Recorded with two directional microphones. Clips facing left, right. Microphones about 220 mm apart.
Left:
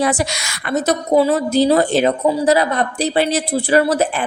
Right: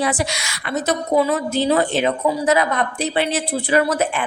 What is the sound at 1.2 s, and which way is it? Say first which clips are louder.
A man's voice: left 5 dB; 35° left (ahead or behind).